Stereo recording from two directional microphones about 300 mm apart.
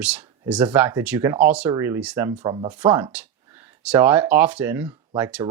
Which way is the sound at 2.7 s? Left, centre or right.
Centre.